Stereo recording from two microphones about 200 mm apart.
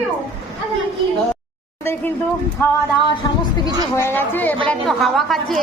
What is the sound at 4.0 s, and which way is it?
A woman's voice, 10° left (ahead or behind).